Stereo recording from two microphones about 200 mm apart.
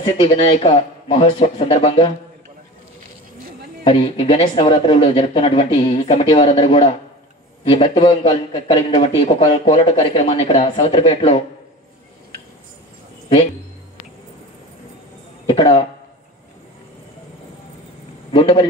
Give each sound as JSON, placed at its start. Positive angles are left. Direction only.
{"t": 0.0, "sound": "a man's voice", "side_deg": 25}
{"t": 3.8, "sound": "a man's voice", "side_deg": 25}
{"t": 15.4, "sound": "speech", "side_deg": 25}
{"t": 18.3, "sound": "a man's voice", "side_deg": 25}